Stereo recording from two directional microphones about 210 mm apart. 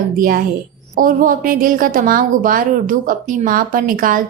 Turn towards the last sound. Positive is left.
turn(degrees=-40)  # may be behind; listen again after turning